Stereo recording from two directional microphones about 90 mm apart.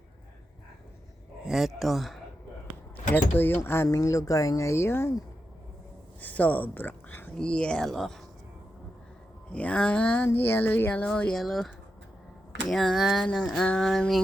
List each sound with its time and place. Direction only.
1.5 s speech: centre (ahead or behind)
2.9 s speech: 20° left (ahead or behind)
6.1 s speech: 20° left (ahead or behind)
7.3 s speech: 10° left (ahead or behind)
9.5 s speech: 15° left (ahead or behind)
10.2 s speech: 25° left (ahead or behind); by 14.2 s 5° left (ahead or behind)